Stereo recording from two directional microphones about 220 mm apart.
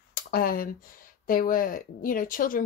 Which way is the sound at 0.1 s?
40° left (ahead or behind).